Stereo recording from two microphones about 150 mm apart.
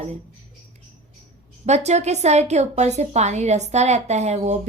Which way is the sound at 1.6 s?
45° right (ahead or behind).